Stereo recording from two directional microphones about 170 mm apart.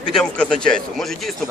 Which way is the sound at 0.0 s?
5° left (ahead or behind).